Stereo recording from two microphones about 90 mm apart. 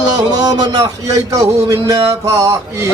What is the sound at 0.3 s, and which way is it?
Speech, 45° right (ahead or behind).